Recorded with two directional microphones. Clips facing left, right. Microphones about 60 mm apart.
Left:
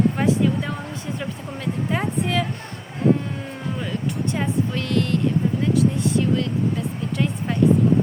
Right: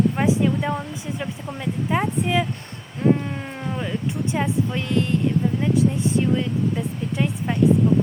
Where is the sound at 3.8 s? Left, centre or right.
Centre.